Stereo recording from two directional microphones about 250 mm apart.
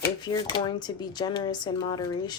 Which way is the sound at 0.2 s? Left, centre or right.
Centre.